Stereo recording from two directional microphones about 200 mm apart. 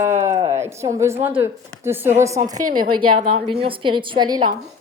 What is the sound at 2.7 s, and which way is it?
Speech, 45° right (ahead or behind).